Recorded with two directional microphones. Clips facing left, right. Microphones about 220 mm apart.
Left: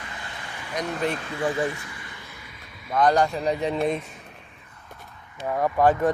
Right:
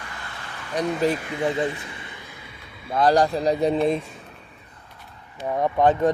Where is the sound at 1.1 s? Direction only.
20° right (ahead or behind).